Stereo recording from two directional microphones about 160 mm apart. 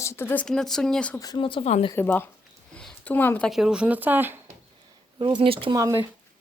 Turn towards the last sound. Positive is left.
turn(degrees=-20)  # may be behind; listen again after turning